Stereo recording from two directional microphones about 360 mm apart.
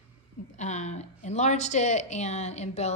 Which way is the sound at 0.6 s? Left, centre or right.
Centre.